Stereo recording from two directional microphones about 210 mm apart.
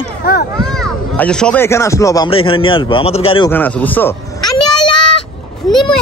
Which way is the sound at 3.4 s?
10° left (ahead or behind).